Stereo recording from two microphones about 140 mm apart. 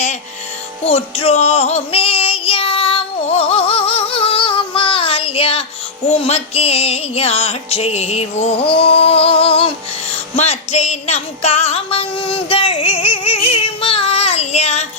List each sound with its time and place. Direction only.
0.9 s female singing: 45° left (ahead or behind)
6.1 s music: 50° left (ahead or behind)